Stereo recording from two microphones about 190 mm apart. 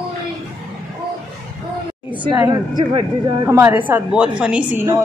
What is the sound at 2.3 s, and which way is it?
Speech, 20° right (ahead or behind).